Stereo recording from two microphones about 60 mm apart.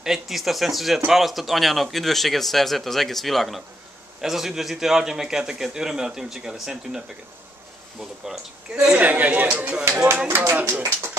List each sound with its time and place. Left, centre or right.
0.0 s a man's voice: centre
8.0 s a man's voice: centre
9.0 s speech: right
10.2 s speech: right